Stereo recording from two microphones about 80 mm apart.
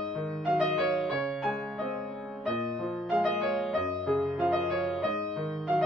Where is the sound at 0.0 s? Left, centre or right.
Centre.